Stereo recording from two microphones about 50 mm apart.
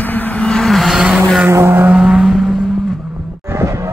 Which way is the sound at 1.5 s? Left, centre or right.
Right.